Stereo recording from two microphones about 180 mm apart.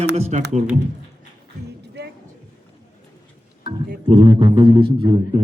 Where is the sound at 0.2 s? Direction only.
40° right (ahead or behind).